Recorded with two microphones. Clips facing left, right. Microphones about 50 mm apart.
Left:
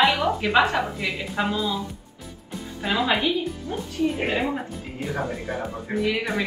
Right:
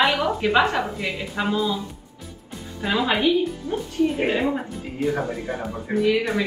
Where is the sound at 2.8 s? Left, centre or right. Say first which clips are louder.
Right 2 dB; centre.